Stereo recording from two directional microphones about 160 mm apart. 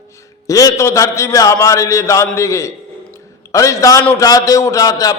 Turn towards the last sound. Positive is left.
turn(degrees=20)  # may be behind; listen again after turning